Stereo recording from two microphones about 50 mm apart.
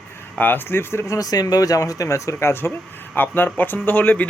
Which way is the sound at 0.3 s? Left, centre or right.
Left.